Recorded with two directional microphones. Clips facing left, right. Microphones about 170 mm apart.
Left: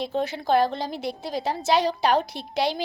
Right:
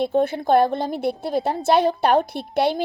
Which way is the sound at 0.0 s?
55° right (ahead or behind).